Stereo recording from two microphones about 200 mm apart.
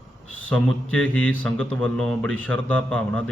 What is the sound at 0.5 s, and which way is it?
Speech, 5° left (ahead or behind).